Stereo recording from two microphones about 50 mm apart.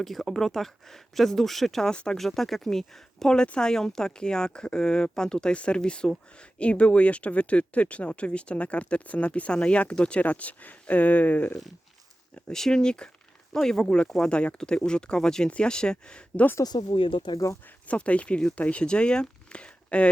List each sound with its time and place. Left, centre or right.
0.0 s speech: centre
1.9 s speech: centre
2.1 s speech: centre; by 11.5 s left
12.5 s speech: centre
17.8 s speech: left